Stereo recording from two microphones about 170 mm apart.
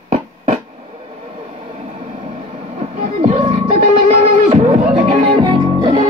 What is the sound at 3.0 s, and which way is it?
Music, 40° right (ahead or behind).